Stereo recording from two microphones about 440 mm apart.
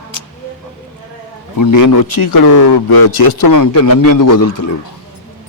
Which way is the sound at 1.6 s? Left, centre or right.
Left.